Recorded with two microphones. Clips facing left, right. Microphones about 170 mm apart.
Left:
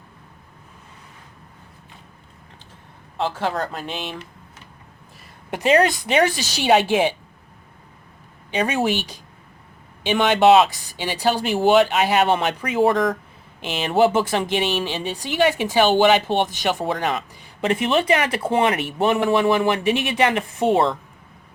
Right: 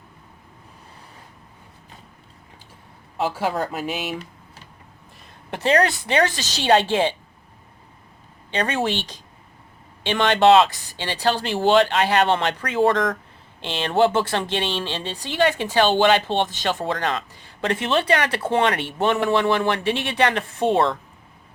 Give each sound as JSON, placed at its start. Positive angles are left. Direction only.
{"t": 3.2, "sound": "speech", "side_deg": -10}
{"t": 5.2, "sound": "speech", "side_deg": 15}
{"t": 8.4, "sound": "speech", "side_deg": 10}